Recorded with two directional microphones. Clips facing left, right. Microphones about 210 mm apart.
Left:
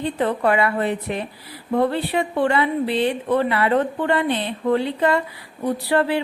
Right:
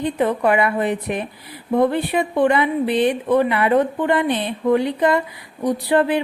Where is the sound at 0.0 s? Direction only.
15° right (ahead or behind).